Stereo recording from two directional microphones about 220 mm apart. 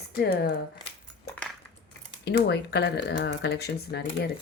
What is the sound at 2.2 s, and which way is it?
Speech, 50° left (ahead or behind).